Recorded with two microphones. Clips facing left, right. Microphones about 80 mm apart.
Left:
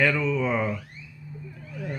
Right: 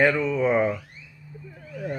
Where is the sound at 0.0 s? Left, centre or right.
Right.